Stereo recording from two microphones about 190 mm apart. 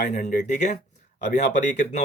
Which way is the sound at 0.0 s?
45° left (ahead or behind).